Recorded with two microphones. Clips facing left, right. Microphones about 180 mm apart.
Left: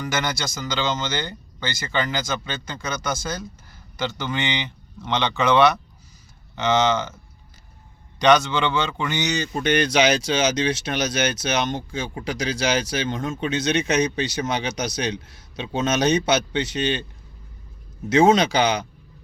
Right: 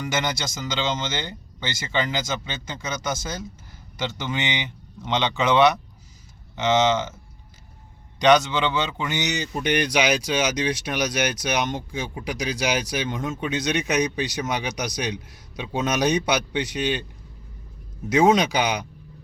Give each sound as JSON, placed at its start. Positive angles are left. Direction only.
{"t": 0.1, "sound": "speech", "side_deg": -20}
{"t": 8.2, "sound": "speech", "side_deg": -15}
{"t": 18.1, "sound": "speech", "side_deg": -15}